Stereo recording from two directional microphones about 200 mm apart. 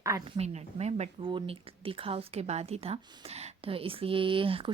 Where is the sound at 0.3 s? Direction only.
35° right (ahead or behind).